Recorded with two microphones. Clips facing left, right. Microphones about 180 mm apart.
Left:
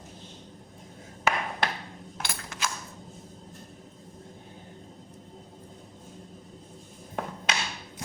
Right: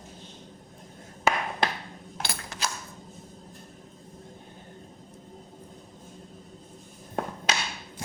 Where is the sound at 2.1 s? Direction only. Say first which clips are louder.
Right 2 dB; 35° right (ahead or behind).